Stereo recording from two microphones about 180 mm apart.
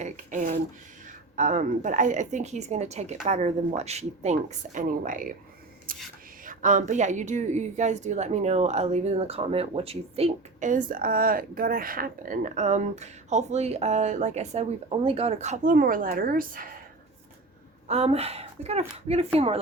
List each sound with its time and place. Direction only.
0.0 s speech: 45° right (ahead or behind)
10.7 s speech: 50° right (ahead or behind)
17.8 s speech: 35° right (ahead or behind)